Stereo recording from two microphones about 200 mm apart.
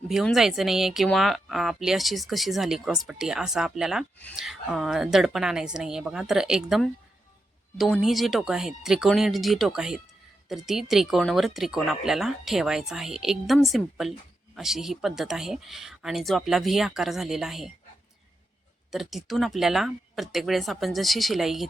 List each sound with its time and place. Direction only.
0.1 s speech: centre (ahead or behind)
18.9 s speech: centre (ahead or behind)